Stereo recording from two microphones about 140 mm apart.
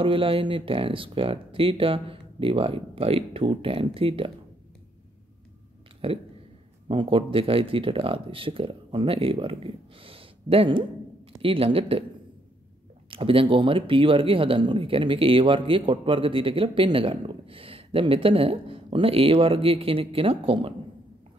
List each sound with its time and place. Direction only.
0.0 s speech: 40° right (ahead or behind)
6.0 s speech: 40° right (ahead or behind)
13.1 s speech: 40° right (ahead or behind)